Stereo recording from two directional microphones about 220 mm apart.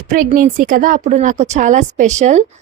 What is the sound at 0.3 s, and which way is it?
Speech, 35° right (ahead or behind).